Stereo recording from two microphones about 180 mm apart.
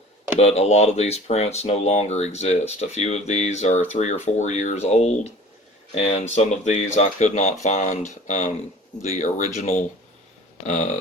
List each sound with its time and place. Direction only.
0.3 s speech: 35° left (ahead or behind)